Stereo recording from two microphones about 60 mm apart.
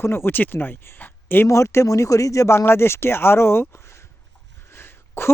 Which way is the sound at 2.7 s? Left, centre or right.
Left.